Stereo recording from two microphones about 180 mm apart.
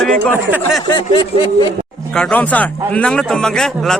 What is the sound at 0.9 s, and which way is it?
Speech, 25° left (ahead or behind).